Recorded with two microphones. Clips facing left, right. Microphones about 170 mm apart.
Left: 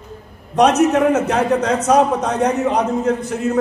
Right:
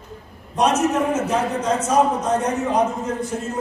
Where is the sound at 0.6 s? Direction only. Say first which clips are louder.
Left 6 dB; 70° left (ahead or behind).